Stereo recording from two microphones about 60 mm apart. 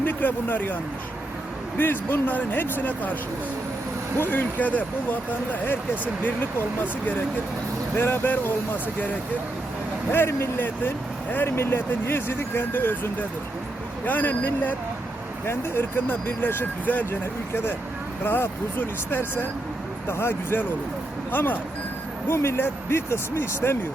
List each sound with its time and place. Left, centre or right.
0.0 s speech: left
1.8 s speech: left
4.2 s speech: left
7.9 s speech: left
10.1 s speech: left
10.6 s speech: left
15.4 s speech: left
17.1 s speech: left
22.3 s speech: left